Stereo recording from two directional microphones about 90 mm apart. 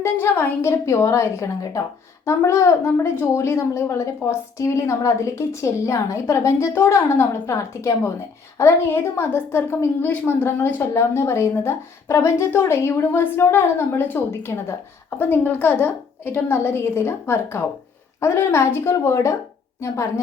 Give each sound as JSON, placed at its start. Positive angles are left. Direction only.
{"t": 0.6, "sound": "a woman's voice", "side_deg": 30}